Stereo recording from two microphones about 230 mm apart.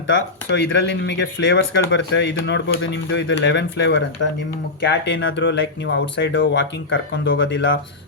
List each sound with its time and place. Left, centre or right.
0.5 s speech: left